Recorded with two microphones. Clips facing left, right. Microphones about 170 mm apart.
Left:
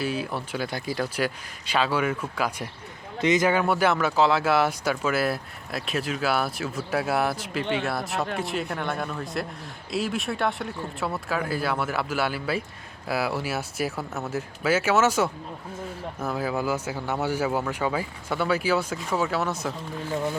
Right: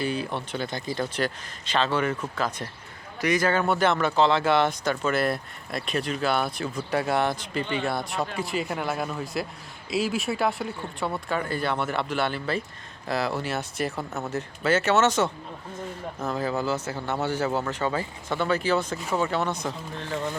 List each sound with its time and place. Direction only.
0.0 s speech: 5° left (ahead or behind)
3.2 s speech: 20° left (ahead or behind)
3.6 s speech: 10° left (ahead or behind)